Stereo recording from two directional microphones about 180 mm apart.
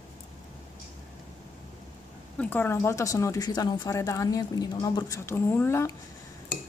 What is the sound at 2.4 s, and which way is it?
A woman's voice, 10° left (ahead or behind).